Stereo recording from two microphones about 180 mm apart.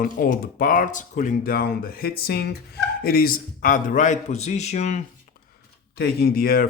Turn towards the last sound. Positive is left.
turn(degrees=50)  # may be behind; listen again after turning